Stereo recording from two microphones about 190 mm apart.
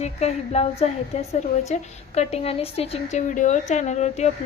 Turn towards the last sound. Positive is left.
turn(degrees=35)  # may be behind; listen again after turning